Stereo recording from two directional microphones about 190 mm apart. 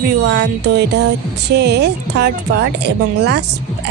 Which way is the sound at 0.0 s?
65° right (ahead or behind).